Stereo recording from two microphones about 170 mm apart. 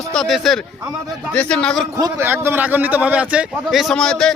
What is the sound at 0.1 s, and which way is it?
Speech, centre (ahead or behind).